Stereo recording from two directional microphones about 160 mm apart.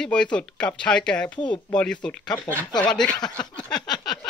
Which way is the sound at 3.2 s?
25° left (ahead or behind).